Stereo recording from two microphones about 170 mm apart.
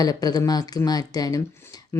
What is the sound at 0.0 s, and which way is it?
Speech, 20° left (ahead or behind).